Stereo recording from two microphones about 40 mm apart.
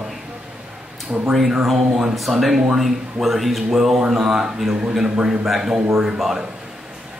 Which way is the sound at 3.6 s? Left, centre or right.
Centre.